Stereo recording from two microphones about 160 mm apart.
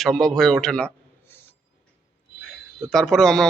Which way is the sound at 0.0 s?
5° left (ahead or behind).